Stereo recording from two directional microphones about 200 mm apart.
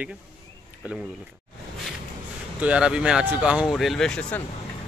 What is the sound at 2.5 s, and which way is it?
Speech, 5° right (ahead or behind).